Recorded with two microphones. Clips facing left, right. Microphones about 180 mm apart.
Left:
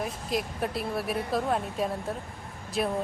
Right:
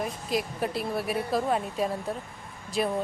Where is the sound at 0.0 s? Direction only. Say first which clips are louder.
Right 1 dB; centre (ahead or behind).